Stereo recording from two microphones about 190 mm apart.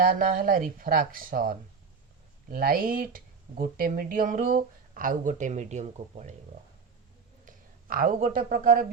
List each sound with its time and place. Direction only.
0.0 s speech: 45° right (ahead or behind)
7.4 s speech: 45° right (ahead or behind)